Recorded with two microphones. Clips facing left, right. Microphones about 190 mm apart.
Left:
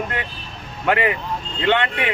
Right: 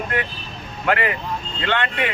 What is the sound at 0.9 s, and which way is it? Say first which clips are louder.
Speech: left 2 dB; 20° left (ahead or behind).